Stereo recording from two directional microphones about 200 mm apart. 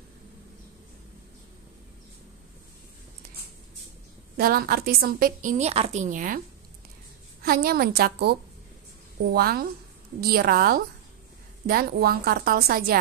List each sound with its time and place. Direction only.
4.4 s a woman's voice: 50° right (ahead or behind)
7.4 s a woman's voice: 50° right (ahead or behind)